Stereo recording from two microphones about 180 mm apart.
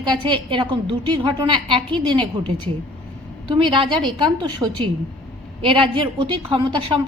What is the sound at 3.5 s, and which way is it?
A woman's voice, 25° right (ahead or behind).